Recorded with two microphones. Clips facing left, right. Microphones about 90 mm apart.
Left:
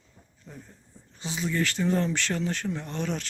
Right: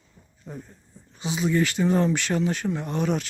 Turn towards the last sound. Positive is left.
turn(degrees=-10)  # may be behind; listen again after turning